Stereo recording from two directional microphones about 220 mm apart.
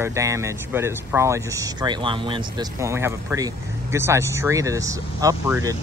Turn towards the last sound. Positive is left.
turn(degrees=-10)  # may be behind; listen again after turning